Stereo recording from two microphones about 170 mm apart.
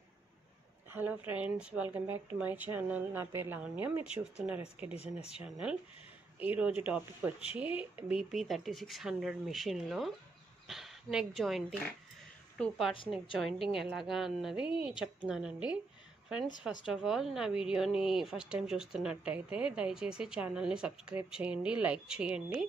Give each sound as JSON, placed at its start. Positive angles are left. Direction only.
{"t": 0.9, "sound": "speech", "side_deg": -10}
{"t": 4.9, "sound": "speech", "side_deg": 35}
{"t": 5.4, "sound": "a woman's voice", "side_deg": -5}
{"t": 16.8, "sound": "a woman's voice", "side_deg": -5}